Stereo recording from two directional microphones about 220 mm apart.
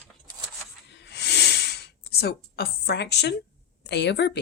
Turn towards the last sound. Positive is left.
turn(degrees=50)  # may be behind; listen again after turning